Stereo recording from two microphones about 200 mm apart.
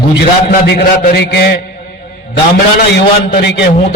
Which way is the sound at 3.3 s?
50° left (ahead or behind).